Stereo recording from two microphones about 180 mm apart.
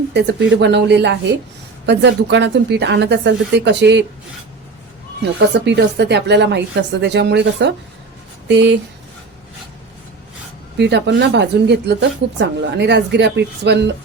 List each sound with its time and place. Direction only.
0.1 s speech: 70° right (ahead or behind)
5.2 s speech: 75° right (ahead or behind)
10.8 s speech: 70° right (ahead or behind)